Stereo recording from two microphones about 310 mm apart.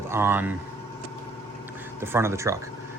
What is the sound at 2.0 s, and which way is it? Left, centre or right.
Speech, centre.